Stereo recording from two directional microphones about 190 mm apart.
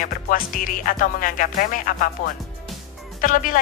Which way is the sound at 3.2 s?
45° left (ahead or behind).